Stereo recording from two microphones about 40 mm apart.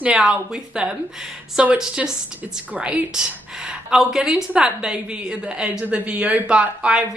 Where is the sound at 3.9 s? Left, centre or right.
Centre.